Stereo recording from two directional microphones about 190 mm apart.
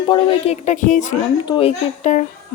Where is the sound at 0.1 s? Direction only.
35° left (ahead or behind).